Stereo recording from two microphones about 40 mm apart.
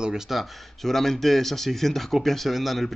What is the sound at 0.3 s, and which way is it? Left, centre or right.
Speech, centre.